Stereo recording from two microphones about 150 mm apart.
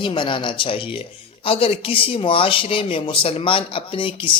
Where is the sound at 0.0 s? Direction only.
35° left (ahead or behind).